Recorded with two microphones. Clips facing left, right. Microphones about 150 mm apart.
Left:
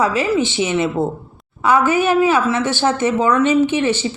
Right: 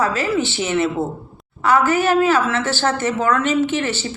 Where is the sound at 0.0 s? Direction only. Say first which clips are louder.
Left 3 dB; 15° left (ahead or behind).